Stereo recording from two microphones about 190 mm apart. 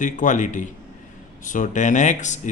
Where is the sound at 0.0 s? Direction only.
40° left (ahead or behind).